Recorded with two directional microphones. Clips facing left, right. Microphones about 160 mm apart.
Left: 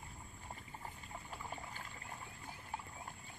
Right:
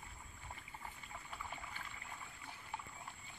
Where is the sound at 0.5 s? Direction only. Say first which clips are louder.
Left 2 dB; 30° left (ahead or behind).